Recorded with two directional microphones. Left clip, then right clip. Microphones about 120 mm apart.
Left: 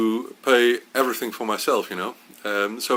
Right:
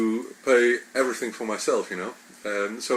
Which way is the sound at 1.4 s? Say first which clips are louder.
Left 3 dB; 30° left (ahead or behind).